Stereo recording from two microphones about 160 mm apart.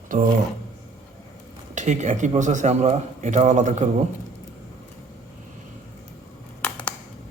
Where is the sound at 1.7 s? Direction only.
50° right (ahead or behind).